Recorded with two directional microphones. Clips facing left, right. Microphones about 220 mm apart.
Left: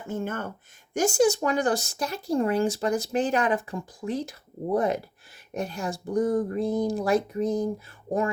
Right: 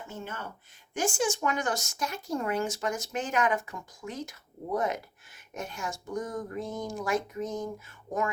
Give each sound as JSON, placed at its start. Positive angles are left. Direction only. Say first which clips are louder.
{"t": 0.1, "sound": "speech", "louder": "left 11 dB", "side_deg": 50}
{"t": 0.9, "sound": "speech", "louder": "left 7 dB", "side_deg": 40}